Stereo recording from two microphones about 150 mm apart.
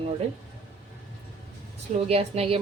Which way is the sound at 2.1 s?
40° right (ahead or behind).